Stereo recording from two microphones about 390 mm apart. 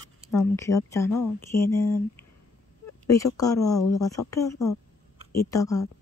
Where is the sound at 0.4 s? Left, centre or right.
Centre.